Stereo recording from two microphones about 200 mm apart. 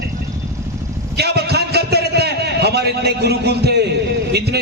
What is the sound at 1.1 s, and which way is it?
A man's voice, 55° right (ahead or behind).